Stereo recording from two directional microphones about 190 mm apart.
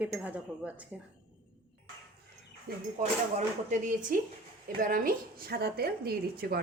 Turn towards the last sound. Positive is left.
turn(degrees=-50)  # may be behind; listen again after turning